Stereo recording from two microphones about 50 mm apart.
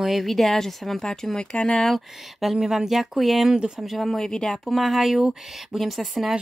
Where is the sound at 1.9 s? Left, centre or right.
Centre.